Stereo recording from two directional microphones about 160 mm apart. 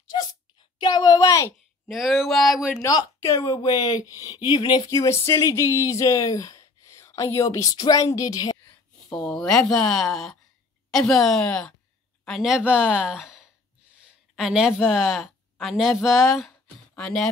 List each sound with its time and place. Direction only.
0.1 s a sound: 30° left (ahead or behind)
0.7 s speech: 25° left (ahead or behind)
1.9 s speech: centre (ahead or behind)
2.8 s speech: 15° left (ahead or behind)
9.1 s speech: 5° left (ahead or behind)